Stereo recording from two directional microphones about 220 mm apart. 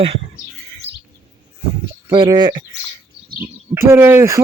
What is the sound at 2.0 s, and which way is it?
Speech, 15° right (ahead or behind).